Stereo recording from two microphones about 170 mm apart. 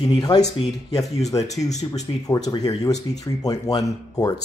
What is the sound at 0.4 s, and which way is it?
Speech, 40° left (ahead or behind).